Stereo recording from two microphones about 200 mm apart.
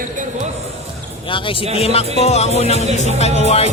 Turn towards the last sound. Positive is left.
turn(degrees=30)  # may be behind; listen again after turning